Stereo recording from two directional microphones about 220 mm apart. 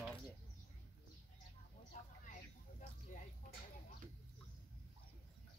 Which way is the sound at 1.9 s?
30° left (ahead or behind).